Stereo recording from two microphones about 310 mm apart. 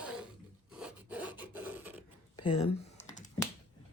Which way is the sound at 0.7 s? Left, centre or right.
Centre.